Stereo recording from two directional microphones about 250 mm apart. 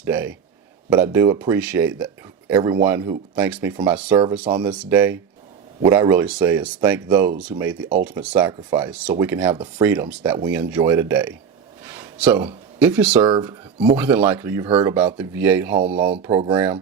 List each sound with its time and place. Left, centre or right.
0.0 s speech: centre
4.7 s speech: centre
9.5 s speech: centre
9.9 s speech: centre
11.9 s a sound: centre
12.8 s speech: centre
14.7 s speech: right
15.2 s speech: centre
16.3 s speech: right